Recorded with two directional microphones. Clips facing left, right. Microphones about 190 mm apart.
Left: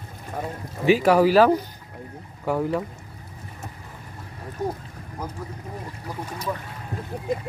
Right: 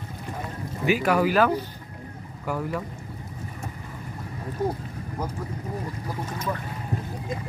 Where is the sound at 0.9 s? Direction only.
35° left (ahead or behind).